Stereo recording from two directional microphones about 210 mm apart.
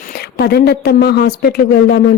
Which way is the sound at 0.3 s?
50° left (ahead or behind).